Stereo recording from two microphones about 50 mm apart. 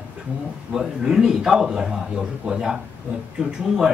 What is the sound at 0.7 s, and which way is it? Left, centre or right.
Speech, centre.